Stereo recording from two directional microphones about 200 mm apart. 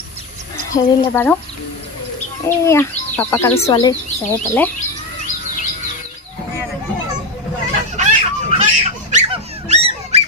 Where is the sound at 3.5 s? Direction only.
30° left (ahead or behind).